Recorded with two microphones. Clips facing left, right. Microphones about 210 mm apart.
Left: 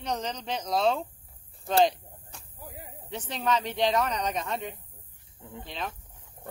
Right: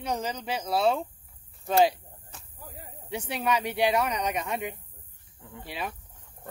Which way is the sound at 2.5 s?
15° left (ahead or behind).